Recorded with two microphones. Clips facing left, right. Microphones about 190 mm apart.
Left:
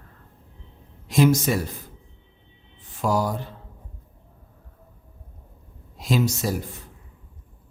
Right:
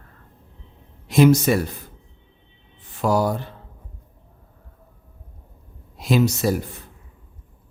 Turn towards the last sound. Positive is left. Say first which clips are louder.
# right 5 dB
turn(degrees=-65)  # may be behind; listen again after turning